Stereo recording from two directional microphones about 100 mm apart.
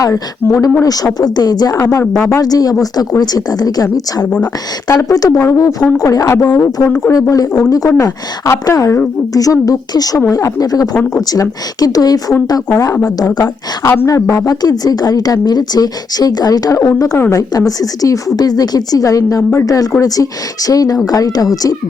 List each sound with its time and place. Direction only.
0.0 s speech: 35° left (ahead or behind)
1.7 s a woman's voice: 30° left (ahead or behind)
5.1 s speech: 35° left (ahead or behind)